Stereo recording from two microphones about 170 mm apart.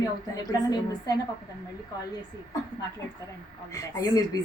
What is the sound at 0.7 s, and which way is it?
Speech, 20° left (ahead or behind).